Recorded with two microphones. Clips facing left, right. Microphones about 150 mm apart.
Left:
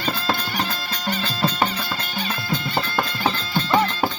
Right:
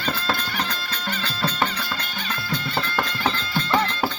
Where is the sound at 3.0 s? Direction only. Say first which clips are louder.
Left 1 dB; 5° left (ahead or behind).